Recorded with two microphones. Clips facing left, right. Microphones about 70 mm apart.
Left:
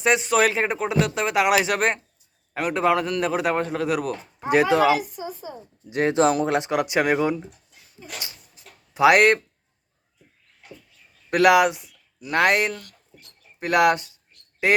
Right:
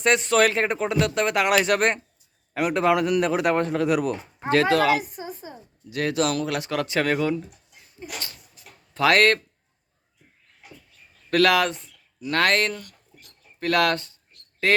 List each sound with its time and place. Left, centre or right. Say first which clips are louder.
0.0 s speech: even; centre
4.4 s speech: left 1 dB; centre
5.1 s a sound: left 2 dB; right
5.9 s speech: left 4 dB; left
8.9 s speech: left 3 dB; centre
11.3 s speech: left 3 dB; centre